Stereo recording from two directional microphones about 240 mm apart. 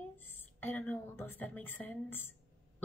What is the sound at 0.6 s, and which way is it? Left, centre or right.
A woman's voice, centre.